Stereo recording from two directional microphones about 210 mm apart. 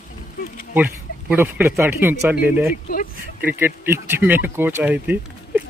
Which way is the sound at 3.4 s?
10° right (ahead or behind).